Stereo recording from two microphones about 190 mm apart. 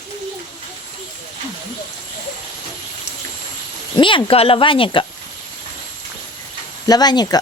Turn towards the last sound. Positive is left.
turn(degrees=20)  # may be behind; listen again after turning